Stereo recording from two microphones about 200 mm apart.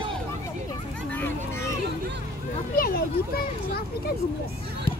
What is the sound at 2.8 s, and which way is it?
Speech, 50° left (ahead or behind).